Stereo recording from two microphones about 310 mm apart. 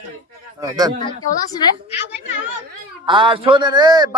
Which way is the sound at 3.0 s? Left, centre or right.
Centre.